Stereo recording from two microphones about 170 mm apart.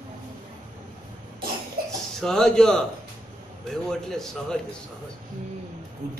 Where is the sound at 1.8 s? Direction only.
60° right (ahead or behind).